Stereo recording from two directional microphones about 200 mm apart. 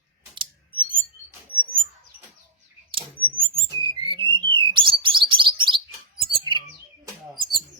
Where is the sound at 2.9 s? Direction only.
25° right (ahead or behind).